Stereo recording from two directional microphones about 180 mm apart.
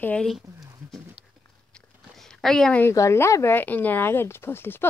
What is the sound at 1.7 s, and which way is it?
Speech, 5° left (ahead or behind).